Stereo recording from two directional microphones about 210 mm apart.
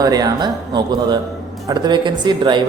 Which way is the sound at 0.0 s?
15° right (ahead or behind).